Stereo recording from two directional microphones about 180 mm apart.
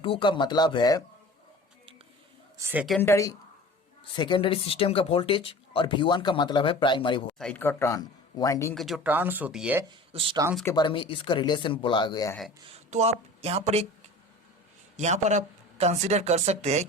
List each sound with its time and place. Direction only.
0.0 s speech: 25° left (ahead or behind)
3.0 s speech: 15° left (ahead or behind)
4.0 s speech: 25° left (ahead or behind)
7.3 s speech: 5° left (ahead or behind)
8.7 s speech: centre (ahead or behind)
9.1 s speech: 10° right (ahead or behind)
10.1 s speech: 30° right (ahead or behind)
10.7 s speech: 25° left (ahead or behind)
12.9 s speech: 35° right (ahead or behind)
14.9 s speech: 40° right (ahead or behind)